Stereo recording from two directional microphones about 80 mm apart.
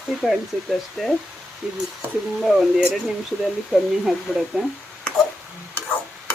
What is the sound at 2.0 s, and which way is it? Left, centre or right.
Speech, centre.